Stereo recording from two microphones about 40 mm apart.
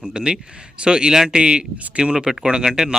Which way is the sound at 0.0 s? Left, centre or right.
Right.